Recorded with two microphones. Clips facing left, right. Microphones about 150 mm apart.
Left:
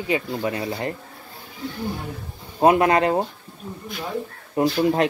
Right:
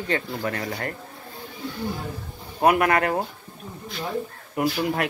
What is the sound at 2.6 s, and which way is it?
Speech, 25° left (ahead or behind).